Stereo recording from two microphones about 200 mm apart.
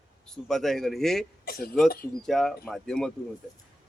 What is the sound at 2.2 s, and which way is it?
Speech, centre (ahead or behind).